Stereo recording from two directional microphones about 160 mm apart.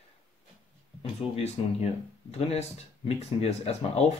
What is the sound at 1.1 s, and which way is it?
Speech, 40° left (ahead or behind).